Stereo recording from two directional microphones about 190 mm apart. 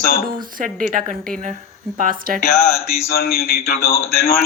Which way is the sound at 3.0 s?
55° left (ahead or behind).